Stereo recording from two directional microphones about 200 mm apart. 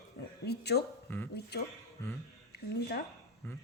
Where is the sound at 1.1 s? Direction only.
10° left (ahead or behind).